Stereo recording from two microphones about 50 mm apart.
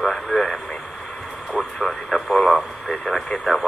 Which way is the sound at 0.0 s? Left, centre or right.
Centre.